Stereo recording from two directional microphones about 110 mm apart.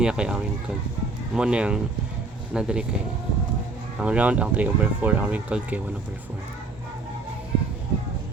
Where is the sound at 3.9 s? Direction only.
10° right (ahead or behind).